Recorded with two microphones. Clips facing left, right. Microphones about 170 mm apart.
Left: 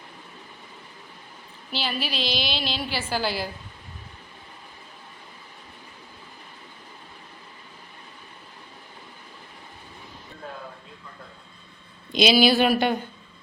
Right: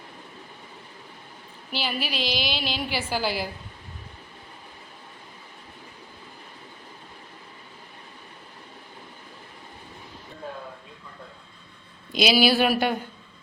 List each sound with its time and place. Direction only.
1.7 s a woman's voice: 10° right (ahead or behind)
12.1 s speech: 5° right (ahead or behind)